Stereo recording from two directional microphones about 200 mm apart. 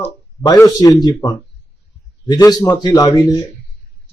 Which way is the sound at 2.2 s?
20° left (ahead or behind).